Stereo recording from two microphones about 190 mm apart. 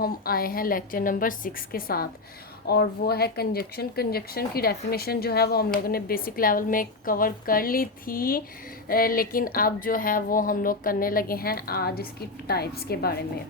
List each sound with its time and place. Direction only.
0.0 s speech: 50° left (ahead or behind)